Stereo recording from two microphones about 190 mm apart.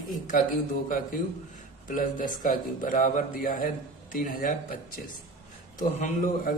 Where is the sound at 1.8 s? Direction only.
45° left (ahead or behind).